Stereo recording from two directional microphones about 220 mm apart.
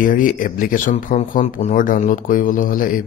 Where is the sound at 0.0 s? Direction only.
40° left (ahead or behind).